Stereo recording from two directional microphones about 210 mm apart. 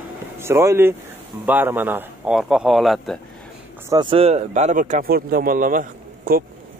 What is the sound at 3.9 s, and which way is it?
Speech, 20° right (ahead or behind).